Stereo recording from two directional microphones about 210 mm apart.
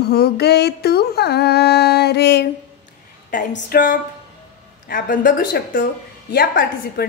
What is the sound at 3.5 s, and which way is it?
Mantra, 45° left (ahead or behind).